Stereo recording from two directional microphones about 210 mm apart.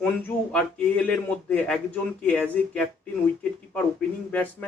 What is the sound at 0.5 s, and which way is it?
A man's voice, 5° left (ahead or behind).